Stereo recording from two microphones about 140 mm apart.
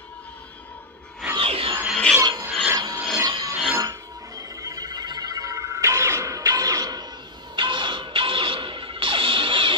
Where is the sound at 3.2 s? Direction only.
25° right (ahead or behind).